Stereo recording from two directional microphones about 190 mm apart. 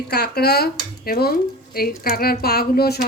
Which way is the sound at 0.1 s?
60° left (ahead or behind).